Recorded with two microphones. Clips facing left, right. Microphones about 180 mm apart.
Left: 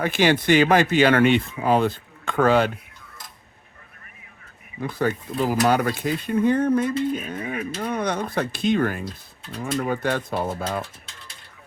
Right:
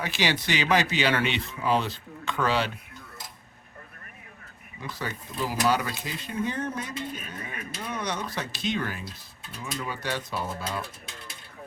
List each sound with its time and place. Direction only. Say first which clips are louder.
0.0 s speech: left 8 dB; 55° left (ahead or behind)
4.8 s speech: left 11 dB; 55° left (ahead or behind)